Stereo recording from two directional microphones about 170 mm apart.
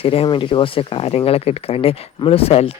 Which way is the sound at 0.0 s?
35° left (ahead or behind).